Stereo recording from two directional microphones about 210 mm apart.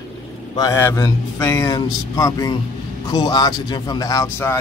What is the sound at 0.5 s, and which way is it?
Speech, 15° left (ahead or behind).